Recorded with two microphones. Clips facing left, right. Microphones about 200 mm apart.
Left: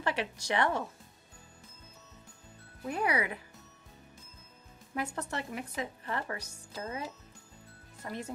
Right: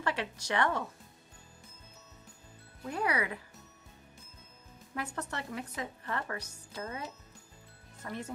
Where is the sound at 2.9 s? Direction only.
15° left (ahead or behind).